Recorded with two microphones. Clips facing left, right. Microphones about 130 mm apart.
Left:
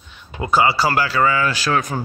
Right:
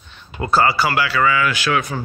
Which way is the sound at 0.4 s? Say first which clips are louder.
Even; 15° left (ahead or behind).